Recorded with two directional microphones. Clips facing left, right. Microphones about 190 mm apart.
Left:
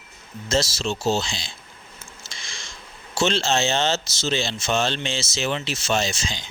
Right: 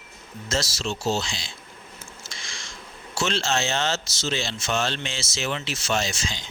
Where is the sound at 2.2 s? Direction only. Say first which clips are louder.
Left 1 dB; 25° left (ahead or behind).